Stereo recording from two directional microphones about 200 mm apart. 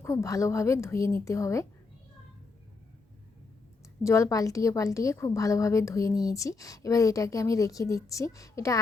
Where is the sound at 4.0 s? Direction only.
15° left (ahead or behind).